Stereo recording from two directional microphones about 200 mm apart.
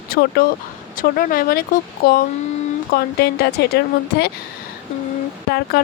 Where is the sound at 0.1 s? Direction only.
50° left (ahead or behind).